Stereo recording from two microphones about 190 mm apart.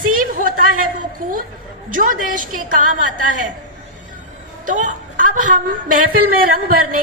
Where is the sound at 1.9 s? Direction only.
45° right (ahead or behind).